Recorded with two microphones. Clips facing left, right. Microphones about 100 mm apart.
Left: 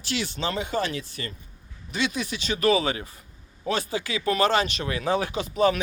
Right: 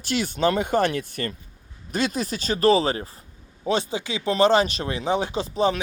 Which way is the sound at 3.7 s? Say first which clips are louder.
Right 3 dB; 25° right (ahead or behind).